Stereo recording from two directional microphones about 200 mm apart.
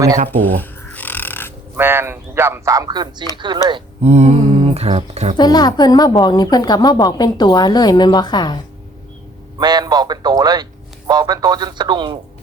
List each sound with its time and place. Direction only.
0.3 s a sound: 10° left (ahead or behind)
1.7 s speech: 10° right (ahead or behind); by 5.4 s 30° right (ahead or behind)
5.4 s a woman's voice: 20° left (ahead or behind)
9.6 s a man's voice: 20° right (ahead or behind)